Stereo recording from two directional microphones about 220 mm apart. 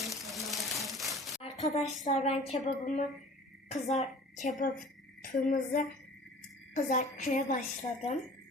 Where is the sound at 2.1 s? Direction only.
30° left (ahead or behind).